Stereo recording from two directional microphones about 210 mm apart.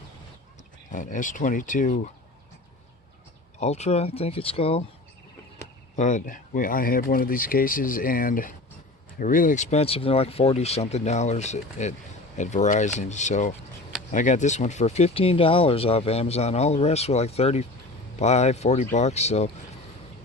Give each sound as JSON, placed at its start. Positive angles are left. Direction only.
{"t": 0.9, "sound": "speech", "side_deg": 40}
{"t": 3.6, "sound": "speech", "side_deg": 30}
{"t": 6.0, "sound": "speech", "side_deg": 35}